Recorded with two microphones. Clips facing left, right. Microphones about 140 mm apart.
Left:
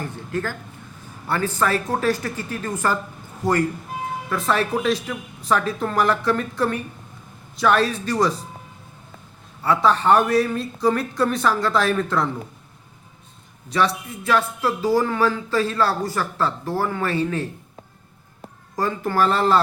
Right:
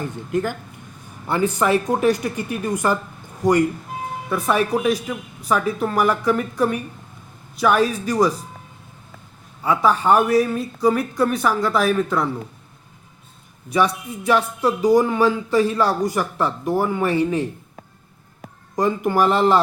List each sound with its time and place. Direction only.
0.0 s speech: 20° right (ahead or behind)
9.6 s speech: 10° right (ahead or behind)
13.7 s speech: 15° right (ahead or behind)
18.8 s speech: 15° right (ahead or behind)